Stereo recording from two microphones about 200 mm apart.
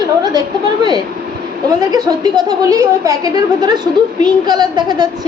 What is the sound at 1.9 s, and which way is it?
A woman's voice, 20° right (ahead or behind).